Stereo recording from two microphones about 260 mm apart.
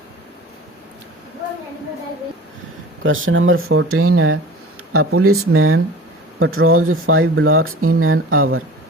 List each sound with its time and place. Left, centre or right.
3.0 s speech: right